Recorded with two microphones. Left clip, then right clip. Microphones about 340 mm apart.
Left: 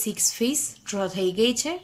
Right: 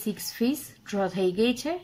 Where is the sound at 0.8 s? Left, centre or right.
Centre.